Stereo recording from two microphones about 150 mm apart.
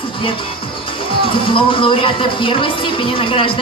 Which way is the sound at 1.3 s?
35° left (ahead or behind).